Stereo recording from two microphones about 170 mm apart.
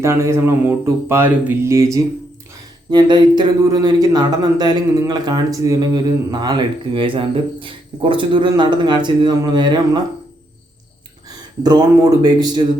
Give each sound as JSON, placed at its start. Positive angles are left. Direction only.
{"t": 0.0, "sound": "speech", "side_deg": -15}
{"t": 11.3, "sound": "speech", "side_deg": -25}